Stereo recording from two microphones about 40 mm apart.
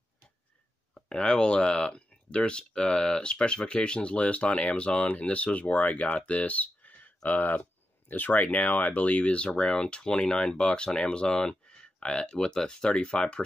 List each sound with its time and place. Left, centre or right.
0.9 s speech: left